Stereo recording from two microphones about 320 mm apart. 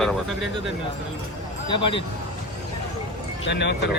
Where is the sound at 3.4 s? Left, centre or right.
Left.